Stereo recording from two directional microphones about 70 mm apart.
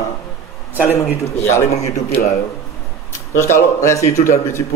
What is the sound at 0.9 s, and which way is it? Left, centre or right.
Speech, left.